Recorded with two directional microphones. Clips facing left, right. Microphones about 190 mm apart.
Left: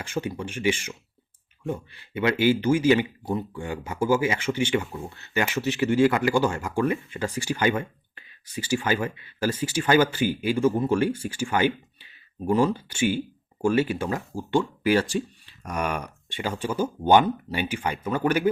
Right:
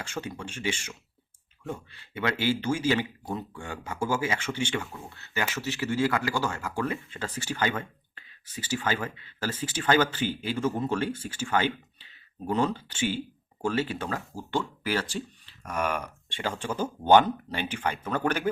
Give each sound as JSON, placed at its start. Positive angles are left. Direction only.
{"t": 0.0, "sound": "speech", "side_deg": 10}
{"t": 2.1, "sound": "speech", "side_deg": 15}